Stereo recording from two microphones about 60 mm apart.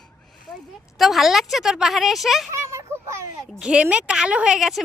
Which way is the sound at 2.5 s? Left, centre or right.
Right.